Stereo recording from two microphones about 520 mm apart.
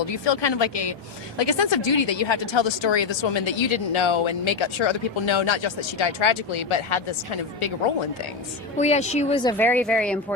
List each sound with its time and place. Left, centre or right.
0.1 s speech: left
8.8 s speech: centre